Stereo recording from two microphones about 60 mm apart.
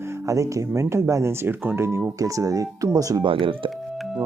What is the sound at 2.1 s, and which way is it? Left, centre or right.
Speech, right.